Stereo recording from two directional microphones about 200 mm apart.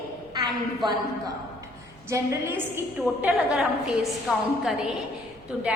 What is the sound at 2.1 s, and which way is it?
A woman's voice, 15° right (ahead or behind).